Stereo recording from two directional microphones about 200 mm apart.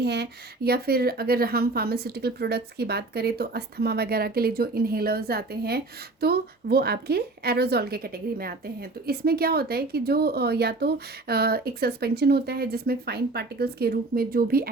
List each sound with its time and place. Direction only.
0.0 s a woman's voice: 55° right (ahead or behind)